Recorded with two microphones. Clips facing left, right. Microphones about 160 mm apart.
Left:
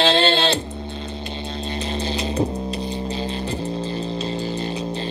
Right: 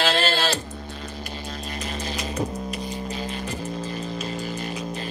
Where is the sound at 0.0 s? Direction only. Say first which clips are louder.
Left 5 dB; 25° left (ahead or behind).